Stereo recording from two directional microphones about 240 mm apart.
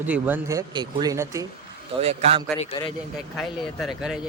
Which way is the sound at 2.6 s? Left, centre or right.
Left.